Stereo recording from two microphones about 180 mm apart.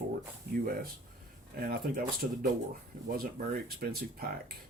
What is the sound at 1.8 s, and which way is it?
Speech, 50° right (ahead or behind).